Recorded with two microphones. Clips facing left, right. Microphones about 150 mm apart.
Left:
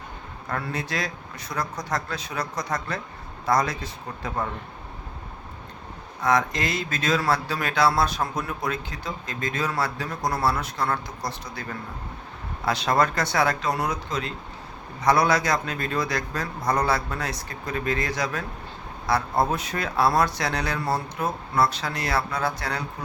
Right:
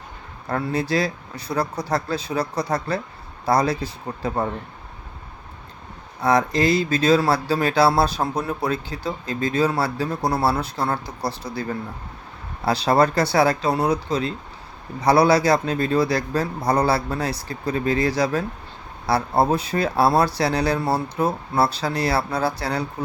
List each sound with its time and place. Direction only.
0.4 s speech: 30° right (ahead or behind)
6.2 s speech: 35° right (ahead or behind)
12.6 s speech: 35° right (ahead or behind)